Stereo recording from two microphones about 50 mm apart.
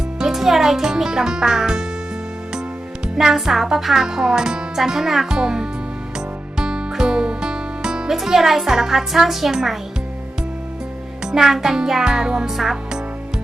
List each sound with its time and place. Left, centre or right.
0.2 s speech: centre
3.2 s speech: centre
6.1 s music: centre
11.3 s speech: centre